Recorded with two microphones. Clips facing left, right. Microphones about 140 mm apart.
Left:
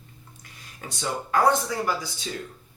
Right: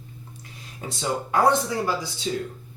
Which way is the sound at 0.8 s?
25° right (ahead or behind).